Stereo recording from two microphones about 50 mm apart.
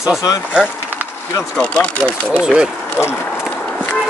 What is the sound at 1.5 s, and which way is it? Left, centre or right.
Speech, left.